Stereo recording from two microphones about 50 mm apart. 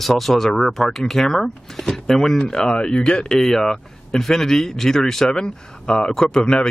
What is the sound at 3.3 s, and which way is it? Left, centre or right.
Speech, centre.